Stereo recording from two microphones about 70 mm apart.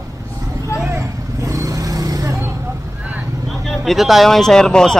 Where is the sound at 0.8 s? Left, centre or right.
Right.